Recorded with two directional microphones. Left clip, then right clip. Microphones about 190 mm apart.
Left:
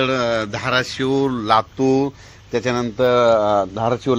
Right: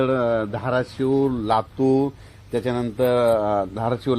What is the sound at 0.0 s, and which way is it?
A man's voice, 5° left (ahead or behind).